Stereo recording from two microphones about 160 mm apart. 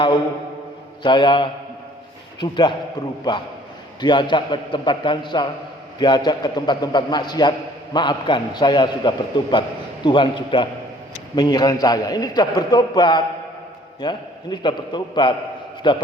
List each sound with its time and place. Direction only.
1.0 s a man's voice: 30° left (ahead or behind)